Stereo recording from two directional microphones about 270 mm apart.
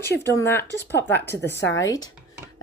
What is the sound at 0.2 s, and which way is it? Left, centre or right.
A woman's voice, centre.